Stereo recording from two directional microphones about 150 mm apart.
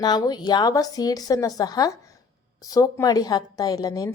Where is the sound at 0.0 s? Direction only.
25° left (ahead or behind).